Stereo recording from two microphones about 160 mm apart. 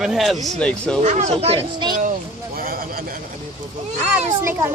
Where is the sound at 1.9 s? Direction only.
55° right (ahead or behind).